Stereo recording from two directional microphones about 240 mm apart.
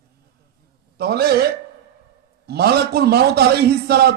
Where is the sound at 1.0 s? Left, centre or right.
Right.